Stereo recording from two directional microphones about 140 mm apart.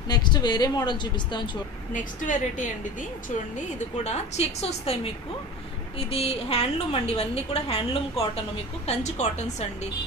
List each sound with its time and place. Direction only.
0.1 s speech: 30° left (ahead or behind)
2.0 s a woman's voice: 65° left (ahead or behind)
4.0 s a woman's voice: 50° left (ahead or behind)
8.8 s a woman's voice: 55° left (ahead or behind)